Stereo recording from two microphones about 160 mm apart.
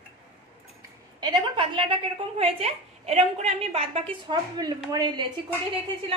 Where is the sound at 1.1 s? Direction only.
30° right (ahead or behind).